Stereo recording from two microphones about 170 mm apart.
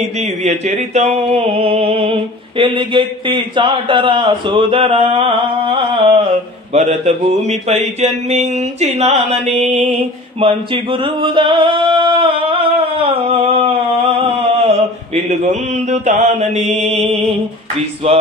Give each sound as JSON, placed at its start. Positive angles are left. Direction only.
{"t": 0.2, "sound": "speech", "side_deg": -40}
{"t": 10.4, "sound": "a sound", "side_deg": -30}
{"t": 15.2, "sound": "speech", "side_deg": -40}